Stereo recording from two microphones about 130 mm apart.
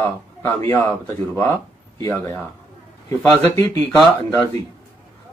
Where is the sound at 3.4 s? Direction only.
20° left (ahead or behind).